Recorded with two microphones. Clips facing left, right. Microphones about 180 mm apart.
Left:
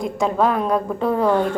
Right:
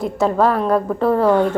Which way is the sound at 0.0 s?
5° right (ahead or behind).